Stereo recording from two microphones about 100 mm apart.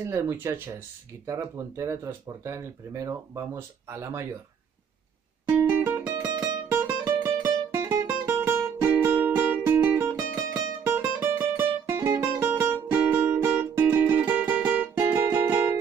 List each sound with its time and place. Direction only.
0.0 s speech: 30° right (ahead or behind)
5.6 s music: 25° right (ahead or behind)
6.1 s music: 40° right (ahead or behind)
6.7 s music: 20° right (ahead or behind)
11.0 s music: 15° right (ahead or behind)